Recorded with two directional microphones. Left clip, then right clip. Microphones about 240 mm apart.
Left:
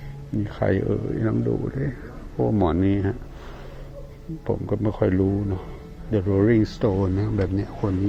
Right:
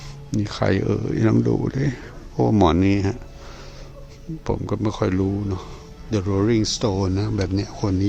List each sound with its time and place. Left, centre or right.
0.3 s speech: right
4.4 s speech: right